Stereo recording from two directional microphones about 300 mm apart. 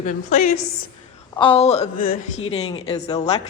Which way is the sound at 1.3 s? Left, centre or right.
Centre.